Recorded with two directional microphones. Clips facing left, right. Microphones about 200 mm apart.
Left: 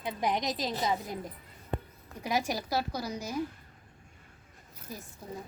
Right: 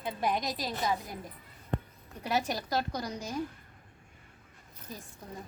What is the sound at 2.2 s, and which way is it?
A woman's voice, 10° left (ahead or behind).